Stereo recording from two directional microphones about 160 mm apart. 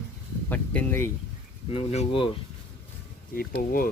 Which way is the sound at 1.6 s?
40° left (ahead or behind).